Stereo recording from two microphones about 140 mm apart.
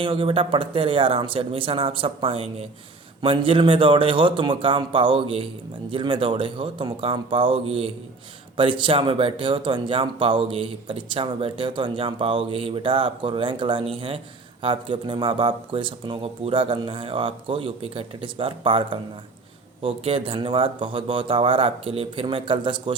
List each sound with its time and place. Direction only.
0.0 s speech: 40° right (ahead or behind)